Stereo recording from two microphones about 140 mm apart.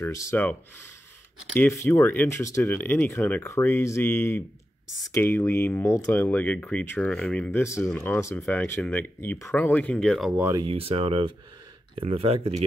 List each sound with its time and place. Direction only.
0.0 s speech: 20° left (ahead or behind)
7.6 s speech: 20° left (ahead or behind); by 10.3 s 5° left (ahead or behind)
10.7 s speech: 45° right (ahead or behind)